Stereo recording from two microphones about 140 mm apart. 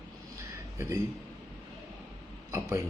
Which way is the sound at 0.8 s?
20° right (ahead or behind).